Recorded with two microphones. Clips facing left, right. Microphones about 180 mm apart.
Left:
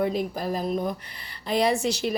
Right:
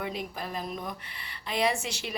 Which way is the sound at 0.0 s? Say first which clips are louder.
Left 9 dB; 35° left (ahead or behind).